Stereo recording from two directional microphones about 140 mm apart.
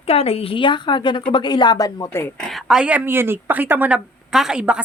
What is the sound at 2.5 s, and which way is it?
Speech, centre (ahead or behind).